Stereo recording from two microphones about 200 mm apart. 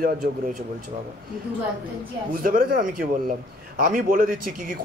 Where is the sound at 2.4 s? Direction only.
45° right (ahead or behind).